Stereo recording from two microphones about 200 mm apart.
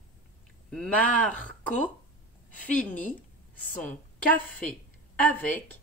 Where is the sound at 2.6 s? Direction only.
10° left (ahead or behind).